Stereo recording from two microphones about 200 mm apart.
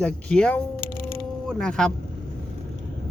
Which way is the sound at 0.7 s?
45° left (ahead or behind).